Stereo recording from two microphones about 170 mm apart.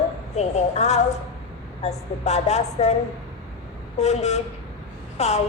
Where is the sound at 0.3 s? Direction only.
40° left (ahead or behind).